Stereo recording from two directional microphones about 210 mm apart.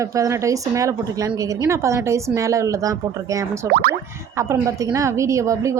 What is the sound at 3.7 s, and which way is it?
Boing, 45° right (ahead or behind).